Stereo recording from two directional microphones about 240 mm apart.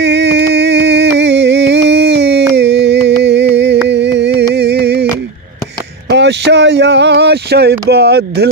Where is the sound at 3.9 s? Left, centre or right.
Right.